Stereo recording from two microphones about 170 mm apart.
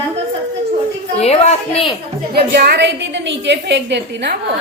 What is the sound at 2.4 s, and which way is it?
A woman's voice, 65° right (ahead or behind).